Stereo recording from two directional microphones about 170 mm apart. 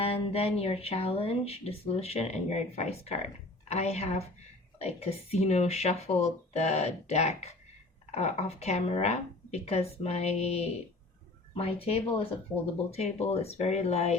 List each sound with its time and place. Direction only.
0.0 s speech: 35° left (ahead or behind)